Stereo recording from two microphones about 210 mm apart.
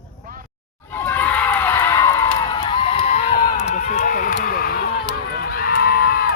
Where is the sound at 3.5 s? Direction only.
35° left (ahead or behind).